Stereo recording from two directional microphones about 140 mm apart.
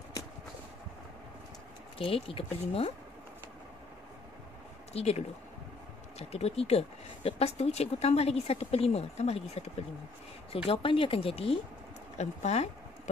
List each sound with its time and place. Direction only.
2.0 s speech: 40° left (ahead or behind)
4.9 s speech: 45° left (ahead or behind)
10.7 s speech: 40° left (ahead or behind)